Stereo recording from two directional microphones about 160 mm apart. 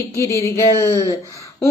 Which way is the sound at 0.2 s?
20° left (ahead or behind).